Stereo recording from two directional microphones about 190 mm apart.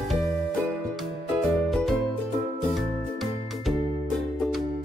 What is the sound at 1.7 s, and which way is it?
Music, centre (ahead or behind).